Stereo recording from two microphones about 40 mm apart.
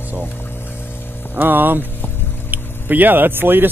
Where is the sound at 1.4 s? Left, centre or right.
Right.